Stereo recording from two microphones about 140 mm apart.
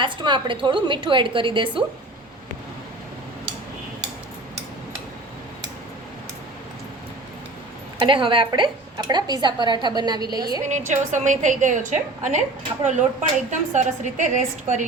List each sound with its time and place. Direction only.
0.0 s a woman's voice: 35° right (ahead or behind)
8.0 s a woman's voice: 35° right (ahead or behind)
10.7 s a woman's voice: 60° right (ahead or behind)